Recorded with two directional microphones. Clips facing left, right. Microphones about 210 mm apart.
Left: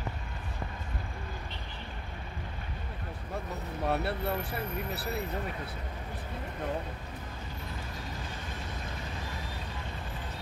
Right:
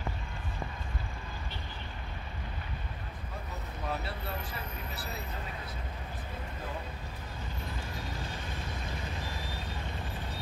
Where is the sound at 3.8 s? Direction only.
65° left (ahead or behind).